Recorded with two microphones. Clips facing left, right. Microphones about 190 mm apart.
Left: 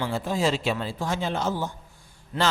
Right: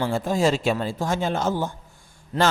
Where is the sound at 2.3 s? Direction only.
40° right (ahead or behind).